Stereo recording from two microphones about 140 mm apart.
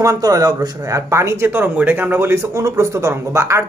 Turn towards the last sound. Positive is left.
turn(degrees=-20)  # may be behind; listen again after turning